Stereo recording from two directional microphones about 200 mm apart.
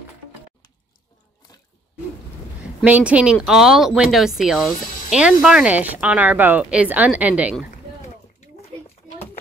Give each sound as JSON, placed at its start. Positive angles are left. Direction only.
{"t": 2.8, "sound": "speech", "side_deg": -5}